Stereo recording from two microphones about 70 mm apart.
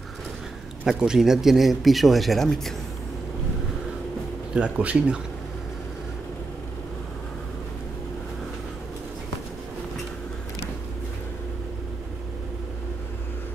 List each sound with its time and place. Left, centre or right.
0.8 s speech: centre
4.6 s speech: centre